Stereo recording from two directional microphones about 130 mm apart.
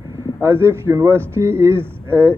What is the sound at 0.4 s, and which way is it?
Speech, 20° right (ahead or behind).